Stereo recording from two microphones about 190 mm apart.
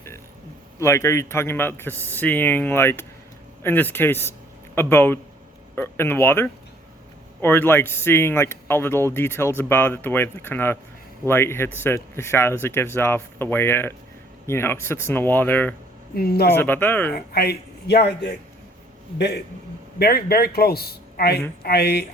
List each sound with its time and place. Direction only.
0.8 s speech: 15° left (ahead or behind)
16.1 s speech: 55° left (ahead or behind)
16.6 s speech: 10° left (ahead or behind)
17.1 s a man's voice: 55° left (ahead or behind)
20.0 s a man's voice: 55° left (ahead or behind)